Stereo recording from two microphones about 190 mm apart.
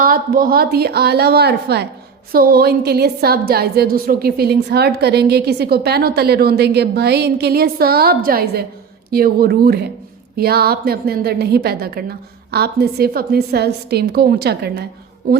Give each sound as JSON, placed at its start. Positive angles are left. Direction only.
{"t": 0.0, "sound": "a woman's voice", "side_deg": -50}